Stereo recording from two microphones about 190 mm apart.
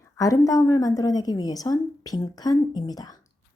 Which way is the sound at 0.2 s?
20° left (ahead or behind).